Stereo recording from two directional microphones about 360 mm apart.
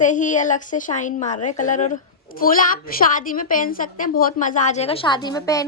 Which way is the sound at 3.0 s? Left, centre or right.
Left.